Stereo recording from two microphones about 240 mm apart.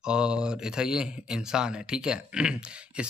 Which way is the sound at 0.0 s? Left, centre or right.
Centre.